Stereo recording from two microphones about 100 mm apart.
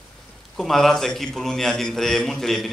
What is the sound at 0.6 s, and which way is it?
A man's voice, 5° left (ahead or behind).